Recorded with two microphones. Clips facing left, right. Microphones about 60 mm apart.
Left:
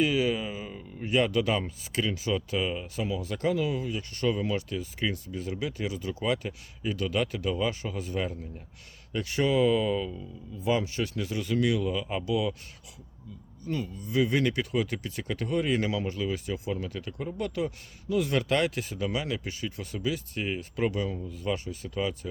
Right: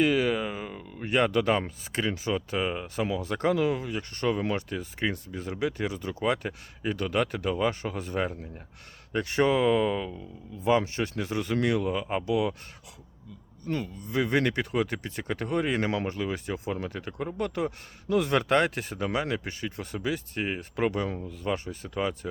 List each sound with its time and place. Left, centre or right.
0.0 s speech: right
13.7 s speech: right